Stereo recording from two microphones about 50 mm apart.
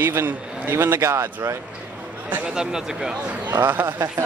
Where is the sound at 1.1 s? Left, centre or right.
Right.